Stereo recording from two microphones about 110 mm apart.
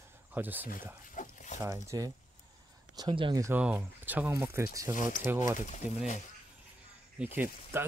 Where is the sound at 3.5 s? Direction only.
10° right (ahead or behind).